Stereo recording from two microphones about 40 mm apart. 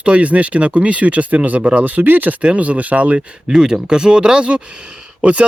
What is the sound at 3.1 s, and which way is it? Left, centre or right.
Speech, centre.